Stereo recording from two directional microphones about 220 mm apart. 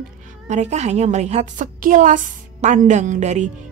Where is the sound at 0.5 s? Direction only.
30° right (ahead or behind).